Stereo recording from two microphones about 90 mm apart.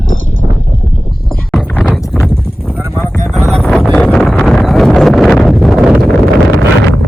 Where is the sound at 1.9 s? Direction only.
5° left (ahead or behind).